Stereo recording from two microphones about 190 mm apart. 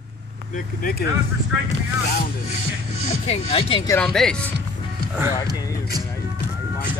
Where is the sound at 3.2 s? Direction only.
30° left (ahead or behind).